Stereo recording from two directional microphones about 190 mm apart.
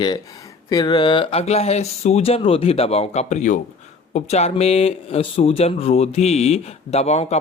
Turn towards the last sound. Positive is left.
turn(degrees=35)  # may be behind; listen again after turning